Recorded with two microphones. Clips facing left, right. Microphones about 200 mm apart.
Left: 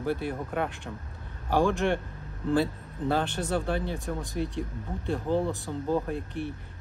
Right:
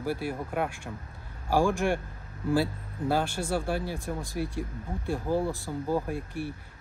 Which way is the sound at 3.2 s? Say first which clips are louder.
Left 1 dB; 20° left (ahead or behind).